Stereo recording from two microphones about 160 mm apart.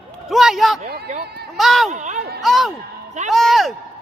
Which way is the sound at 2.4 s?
Centre (ahead or behind).